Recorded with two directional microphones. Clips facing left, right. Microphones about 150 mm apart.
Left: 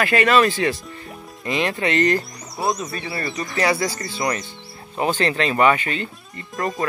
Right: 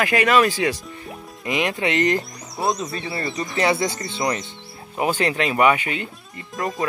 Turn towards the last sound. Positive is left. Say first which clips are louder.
# left 1 dB
turn(degrees=0)  # may be behind; listen again after turning